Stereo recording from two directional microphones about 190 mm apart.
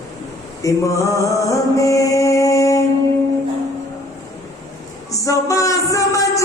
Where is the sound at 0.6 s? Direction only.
15° left (ahead or behind).